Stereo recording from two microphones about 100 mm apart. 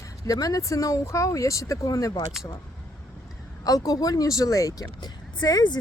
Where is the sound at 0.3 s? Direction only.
35° left (ahead or behind).